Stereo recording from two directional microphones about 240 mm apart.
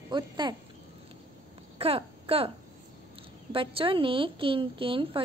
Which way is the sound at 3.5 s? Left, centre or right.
Right.